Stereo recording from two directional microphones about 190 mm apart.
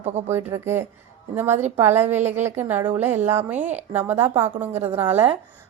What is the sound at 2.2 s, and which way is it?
Speech, 40° right (ahead or behind).